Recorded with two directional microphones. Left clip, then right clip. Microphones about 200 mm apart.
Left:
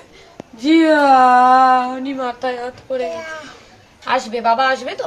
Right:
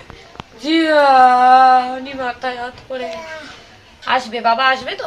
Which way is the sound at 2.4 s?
50° left (ahead or behind).